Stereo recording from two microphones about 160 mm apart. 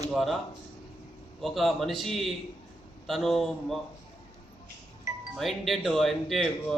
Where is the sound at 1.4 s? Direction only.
Centre (ahead or behind).